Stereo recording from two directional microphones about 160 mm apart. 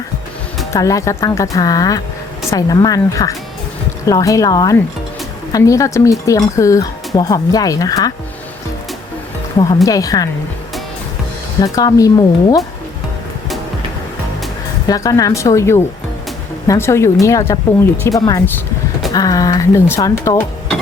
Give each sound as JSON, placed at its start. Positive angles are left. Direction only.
{"t": 0.7, "sound": "speech", "side_deg": 20}
{"t": 9.8, "sound": "speech", "side_deg": 20}
{"t": 11.6, "sound": "speech", "side_deg": 20}
{"t": 14.8, "sound": "speech", "side_deg": 20}